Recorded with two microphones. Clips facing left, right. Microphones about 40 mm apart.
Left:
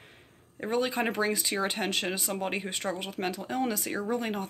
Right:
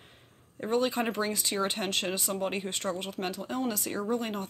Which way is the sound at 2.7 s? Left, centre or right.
Left.